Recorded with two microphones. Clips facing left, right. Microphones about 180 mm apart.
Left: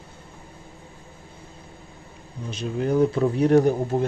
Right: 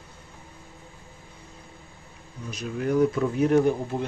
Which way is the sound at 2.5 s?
30° left (ahead or behind).